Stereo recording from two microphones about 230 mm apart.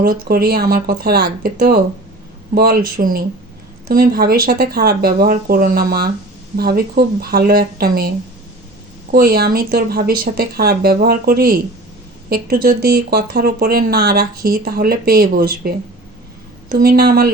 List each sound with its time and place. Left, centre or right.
0.0 s speech: right
9.1 s speech: right